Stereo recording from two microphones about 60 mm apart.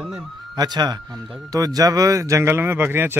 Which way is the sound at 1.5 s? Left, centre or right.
Right.